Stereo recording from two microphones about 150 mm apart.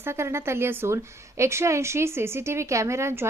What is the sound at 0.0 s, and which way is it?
A woman's voice, 15° right (ahead or behind).